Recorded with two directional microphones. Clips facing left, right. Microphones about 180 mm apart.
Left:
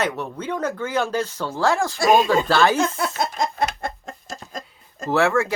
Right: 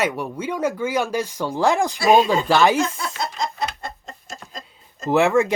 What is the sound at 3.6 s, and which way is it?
Chicken, 55° left (ahead or behind).